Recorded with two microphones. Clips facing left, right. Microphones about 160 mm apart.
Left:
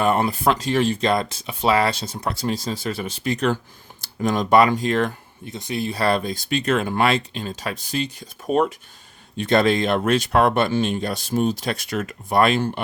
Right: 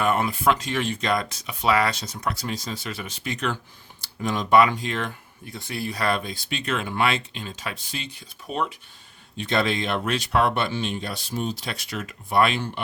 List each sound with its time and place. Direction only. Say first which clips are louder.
0.0 s speech: left 3 dB; 35° left (ahead or behind)
5.5 s speech: left 5 dB; 20° left (ahead or behind); by 12.8 s 45° left (ahead or behind)